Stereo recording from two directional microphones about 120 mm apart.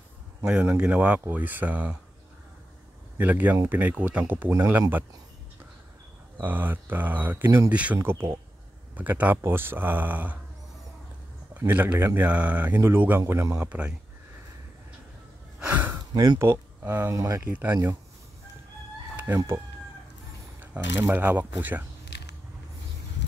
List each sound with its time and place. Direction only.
0.5 s speech: 10° right (ahead or behind)
3.2 s speech: 15° right (ahead or behind)
6.4 s speech: 15° right (ahead or behind)
11.5 s speech: 15° right (ahead or behind)
13.7 s speech: 10° right (ahead or behind)
15.6 s a sound: 15° right (ahead or behind)
16.1 s speech: 35° right (ahead or behind)
16.3 s speech: 20° right (ahead or behind)
17.5 s speech: 15° right (ahead or behind)
19.1 s speech: 20° right (ahead or behind)
20.7 s speech: 15° right (ahead or behind)